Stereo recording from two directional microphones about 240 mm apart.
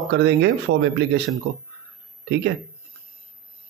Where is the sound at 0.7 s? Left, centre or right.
Right.